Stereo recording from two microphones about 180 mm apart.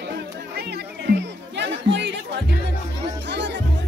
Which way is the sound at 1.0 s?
75° right (ahead or behind).